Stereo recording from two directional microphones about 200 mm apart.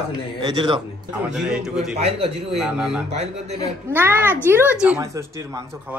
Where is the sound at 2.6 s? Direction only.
5° right (ahead or behind).